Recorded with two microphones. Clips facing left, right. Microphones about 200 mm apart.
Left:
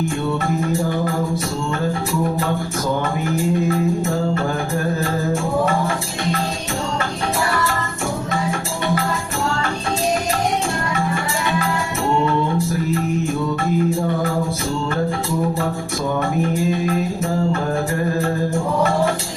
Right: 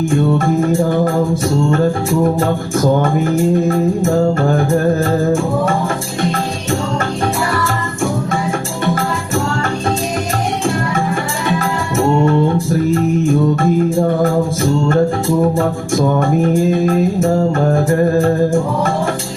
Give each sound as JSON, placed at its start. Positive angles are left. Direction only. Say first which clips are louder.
{"t": 0.0, "sound": "music", "louder": "right 7 dB", "side_deg": -50}
{"t": 2.2, "sound": "music", "louder": "right 6 dB", "side_deg": -45}
{"t": 11.6, "sound": "music", "louder": "right 6 dB", "side_deg": -45}
{"t": 13.6, "sound": "music", "louder": "right 5 dB", "side_deg": -45}